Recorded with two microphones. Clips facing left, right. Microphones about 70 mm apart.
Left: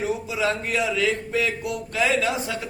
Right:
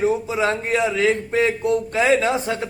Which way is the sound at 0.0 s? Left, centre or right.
Right.